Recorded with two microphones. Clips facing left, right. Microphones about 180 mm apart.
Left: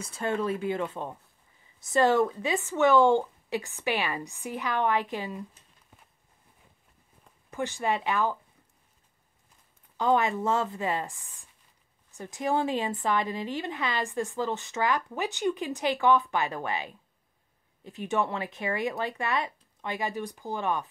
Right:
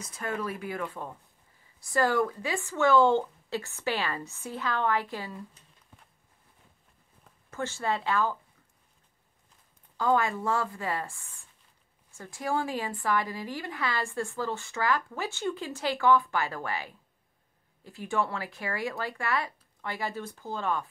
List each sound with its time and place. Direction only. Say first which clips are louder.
0.0 s a woman's voice: left 4 dB; 30° left (ahead or behind)
7.5 s speech: left 2 dB; 15° left (ahead or behind)
9.9 s a woman's voice: left 1 dB; 20° left (ahead or behind)